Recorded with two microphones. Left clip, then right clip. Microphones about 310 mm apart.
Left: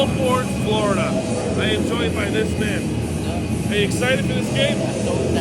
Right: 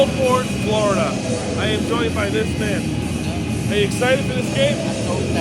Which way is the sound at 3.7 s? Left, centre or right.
Centre.